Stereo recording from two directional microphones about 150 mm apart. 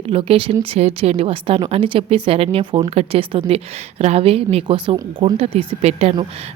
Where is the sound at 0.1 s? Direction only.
35° right (ahead or behind).